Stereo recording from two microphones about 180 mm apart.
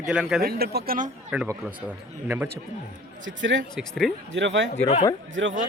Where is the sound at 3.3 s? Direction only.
90° right.